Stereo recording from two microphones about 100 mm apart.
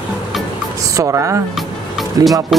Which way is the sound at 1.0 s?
30° right (ahead or behind).